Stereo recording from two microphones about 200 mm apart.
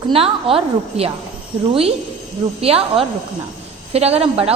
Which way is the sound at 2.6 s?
30° right (ahead or behind).